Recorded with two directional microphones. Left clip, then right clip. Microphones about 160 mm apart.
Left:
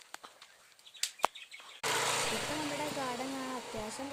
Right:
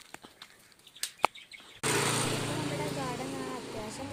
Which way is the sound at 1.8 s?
45° right (ahead or behind).